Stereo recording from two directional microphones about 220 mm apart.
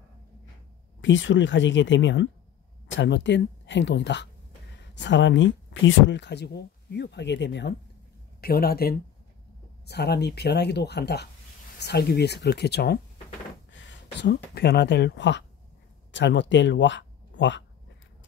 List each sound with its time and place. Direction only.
1.0 s speech: 55° left (ahead or behind)